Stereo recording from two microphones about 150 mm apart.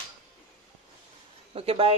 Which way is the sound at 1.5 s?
40° right (ahead or behind).